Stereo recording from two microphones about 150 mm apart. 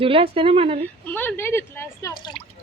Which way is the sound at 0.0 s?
40° right (ahead or behind).